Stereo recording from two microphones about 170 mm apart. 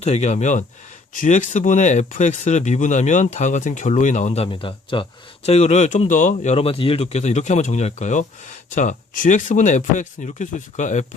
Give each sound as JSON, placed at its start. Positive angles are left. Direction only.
{"t": 0.0, "sound": "speech", "side_deg": 40}
{"t": 4.4, "sound": "speech", "side_deg": 30}